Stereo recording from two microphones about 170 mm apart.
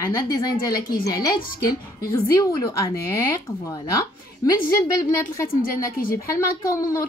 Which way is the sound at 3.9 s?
20° left (ahead or behind).